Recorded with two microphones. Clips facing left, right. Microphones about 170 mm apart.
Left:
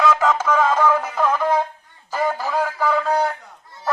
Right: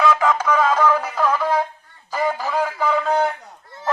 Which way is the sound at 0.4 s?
10° left (ahead or behind).